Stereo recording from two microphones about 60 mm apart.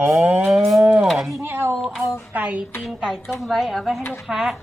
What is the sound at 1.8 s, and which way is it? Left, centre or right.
Speech, centre.